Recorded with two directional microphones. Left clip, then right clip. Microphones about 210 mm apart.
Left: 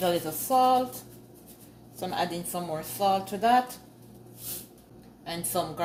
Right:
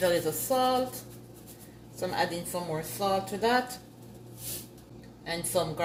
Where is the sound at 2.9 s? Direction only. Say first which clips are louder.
Left 4 dB; 35° left (ahead or behind).